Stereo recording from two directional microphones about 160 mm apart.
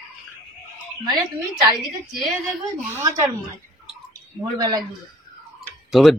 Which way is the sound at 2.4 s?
15° right (ahead or behind).